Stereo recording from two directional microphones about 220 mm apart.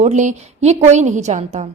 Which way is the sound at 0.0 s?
35° right (ahead or behind).